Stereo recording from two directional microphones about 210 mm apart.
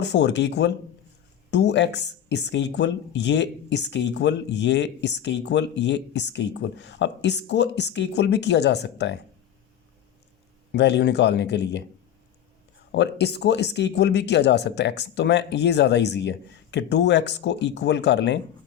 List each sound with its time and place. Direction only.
0.0 s speech: 55° left (ahead or behind)
10.7 s speech: 55° left (ahead or behind)
12.9 s speech: 55° left (ahead or behind)